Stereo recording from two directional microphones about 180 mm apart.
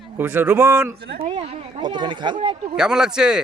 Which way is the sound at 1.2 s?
35° right (ahead or behind).